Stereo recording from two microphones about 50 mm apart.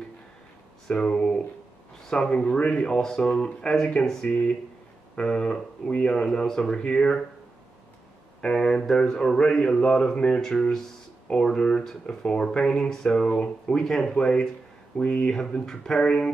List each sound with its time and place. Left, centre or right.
0.8 s speech: centre
8.4 s speech: centre